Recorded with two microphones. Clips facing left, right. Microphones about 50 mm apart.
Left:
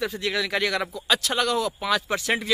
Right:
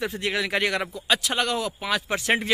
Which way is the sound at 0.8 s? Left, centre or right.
Right.